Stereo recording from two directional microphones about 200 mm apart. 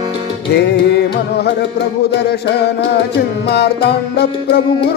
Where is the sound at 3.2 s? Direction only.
55° left (ahead or behind).